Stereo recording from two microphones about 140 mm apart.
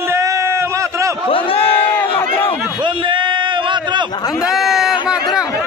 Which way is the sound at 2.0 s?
40° left (ahead or behind).